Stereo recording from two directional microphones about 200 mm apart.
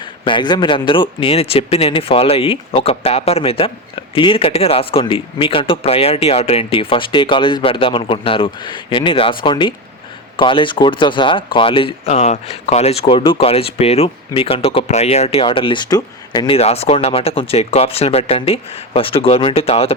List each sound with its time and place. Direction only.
0.3 s speech: 20° left (ahead or behind)